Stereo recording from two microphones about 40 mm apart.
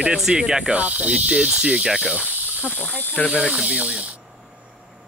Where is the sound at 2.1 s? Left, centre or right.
Right.